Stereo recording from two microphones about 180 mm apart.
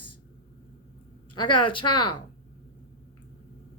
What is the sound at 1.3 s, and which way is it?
Speech, 25° left (ahead or behind).